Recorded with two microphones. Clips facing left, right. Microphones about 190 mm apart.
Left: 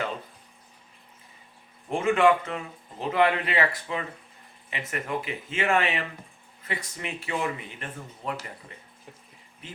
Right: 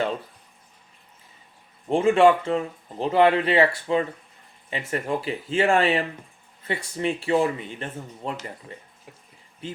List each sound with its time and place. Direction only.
1.9 s speech: 30° right (ahead or behind)